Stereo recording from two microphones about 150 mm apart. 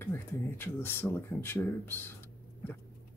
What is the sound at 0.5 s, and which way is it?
Speech, 15° left (ahead or behind).